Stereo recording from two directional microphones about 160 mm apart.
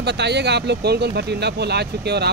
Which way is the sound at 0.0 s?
90° right.